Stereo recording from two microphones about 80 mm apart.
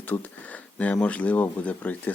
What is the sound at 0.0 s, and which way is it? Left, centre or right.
Speech, left.